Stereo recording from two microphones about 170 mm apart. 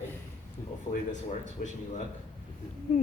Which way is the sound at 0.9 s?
45° left (ahead or behind).